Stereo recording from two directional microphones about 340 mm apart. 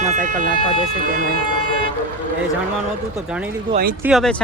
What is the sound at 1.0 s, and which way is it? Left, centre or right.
Speech, right.